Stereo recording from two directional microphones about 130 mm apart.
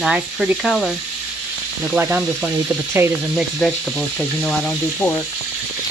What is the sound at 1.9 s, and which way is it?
Speech, 15° right (ahead or behind).